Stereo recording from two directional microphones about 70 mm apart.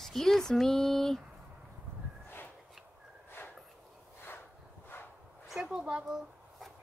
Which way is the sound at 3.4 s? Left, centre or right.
Left.